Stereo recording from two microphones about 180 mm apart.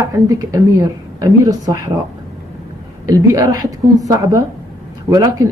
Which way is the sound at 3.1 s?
20° right (ahead or behind).